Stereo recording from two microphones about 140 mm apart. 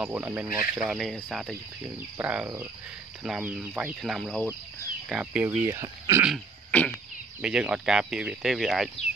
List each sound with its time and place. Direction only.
0.0 s speech: 15° right (ahead or behind)
0.8 s speech: centre (ahead or behind)
5.7 s speech: 20° right (ahead or behind)
6.7 s a sound: 10° left (ahead or behind)
7.4 s speech: 5° right (ahead or behind)